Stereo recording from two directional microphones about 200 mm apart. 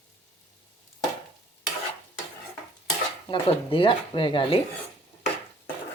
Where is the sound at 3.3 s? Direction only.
25° left (ahead or behind).